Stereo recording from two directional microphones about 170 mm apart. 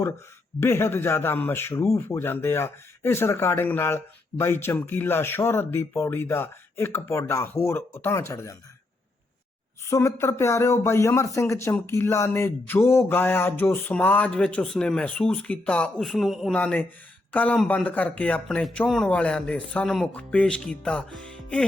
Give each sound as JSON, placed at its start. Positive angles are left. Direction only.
{"t": 0.6, "sound": "speech", "side_deg": 15}
{"t": 9.8, "sound": "speech", "side_deg": 15}